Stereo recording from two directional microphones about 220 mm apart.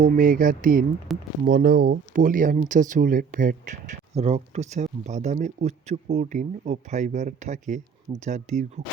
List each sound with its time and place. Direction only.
0.0 s speech: 40° right (ahead or behind)
1.1 s speech: centre (ahead or behind)
1.5 s speech: 40° right (ahead or behind)